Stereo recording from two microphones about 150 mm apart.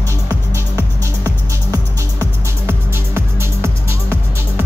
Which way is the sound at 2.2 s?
15° right (ahead or behind).